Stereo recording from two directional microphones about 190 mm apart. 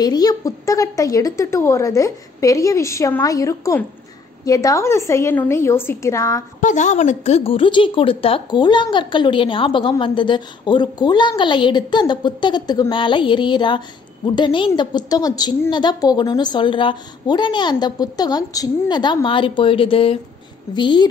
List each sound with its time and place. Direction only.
0.0 s a woman's voice: 20° left (ahead or behind)
6.6 s a woman's voice: 40° left (ahead or behind); by 21.1 s 25° left (ahead or behind)